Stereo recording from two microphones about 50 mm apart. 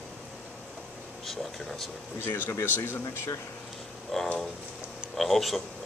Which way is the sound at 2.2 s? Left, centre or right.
Left.